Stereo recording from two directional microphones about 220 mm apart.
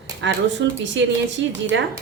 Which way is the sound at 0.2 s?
55° right (ahead or behind).